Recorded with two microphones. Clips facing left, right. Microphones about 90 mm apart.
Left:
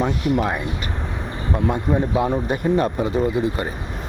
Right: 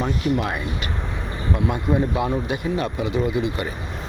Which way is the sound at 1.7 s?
35° left (ahead or behind).